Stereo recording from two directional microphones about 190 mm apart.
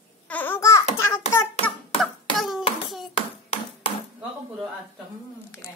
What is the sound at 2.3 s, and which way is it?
Hands, centre (ahead or behind).